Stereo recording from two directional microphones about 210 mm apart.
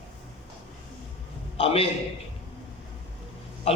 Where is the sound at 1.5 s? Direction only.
25° left (ahead or behind).